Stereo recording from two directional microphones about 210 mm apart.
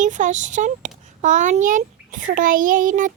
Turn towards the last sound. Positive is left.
turn(degrees=-40)  # may be behind; listen again after turning